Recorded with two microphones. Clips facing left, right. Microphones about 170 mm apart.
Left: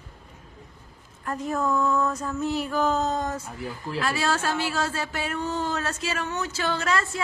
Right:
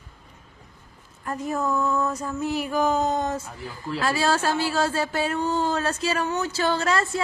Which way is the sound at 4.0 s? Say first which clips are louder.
Right 3 dB; 35° right (ahead or behind).